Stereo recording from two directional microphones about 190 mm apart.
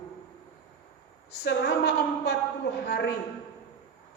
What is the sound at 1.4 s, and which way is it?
A man's voice, 60° left (ahead or behind).